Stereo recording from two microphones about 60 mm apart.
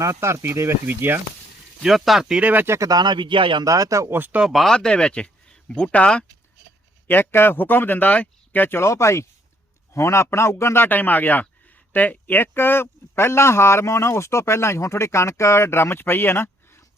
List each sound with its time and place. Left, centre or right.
0.0 s speech: right
0.9 s speech: right
1.8 s speech: centre
2.4 s speech: right
2.6 s speech: right
3.6 s speech: right
4.1 s speech: right
4.4 s speech: centre
4.7 s speech: centre
7.1 s speech: left
8.8 s speech: left
10.8 s speech: left